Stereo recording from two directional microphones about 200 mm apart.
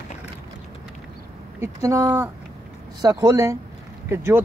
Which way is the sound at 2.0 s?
5° right (ahead or behind).